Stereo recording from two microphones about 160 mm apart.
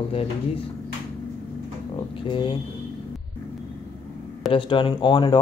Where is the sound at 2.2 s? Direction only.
30° left (ahead or behind).